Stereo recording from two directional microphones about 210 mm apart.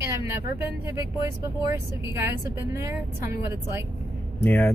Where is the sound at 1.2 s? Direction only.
15° right (ahead or behind).